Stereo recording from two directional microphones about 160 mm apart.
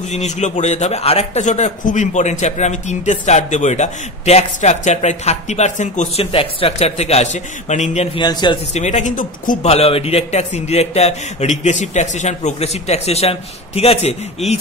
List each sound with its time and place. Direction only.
0.1 s a man's voice: 45° left (ahead or behind)
8.2 s a man's voice: 25° left (ahead or behind)
8.7 s a man's voice: 45° left (ahead or behind)
9.7 s a man's voice: 40° left (ahead or behind)